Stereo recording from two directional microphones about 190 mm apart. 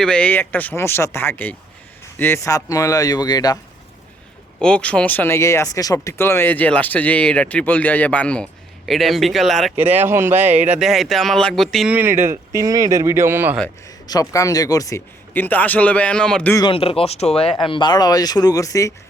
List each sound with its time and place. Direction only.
0.0 s speech: 5° left (ahead or behind)
4.6 s speech: 5° left (ahead or behind)
9.7 s speech: 10° right (ahead or behind)
10.5 s speech: 35° right (ahead or behind)
10.8 s speech: centre (ahead or behind)
13.8 s speech: 20° left (ahead or behind)
16.6 s speech: 25° left (ahead or behind)